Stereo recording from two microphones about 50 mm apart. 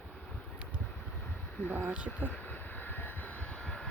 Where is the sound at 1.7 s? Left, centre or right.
Right.